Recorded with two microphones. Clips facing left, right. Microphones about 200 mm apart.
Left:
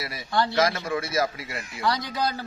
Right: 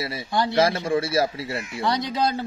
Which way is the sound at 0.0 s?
25° right (ahead or behind).